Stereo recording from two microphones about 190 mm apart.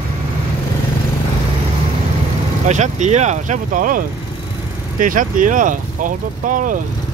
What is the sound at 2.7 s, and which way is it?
Speech, 40° right (ahead or behind).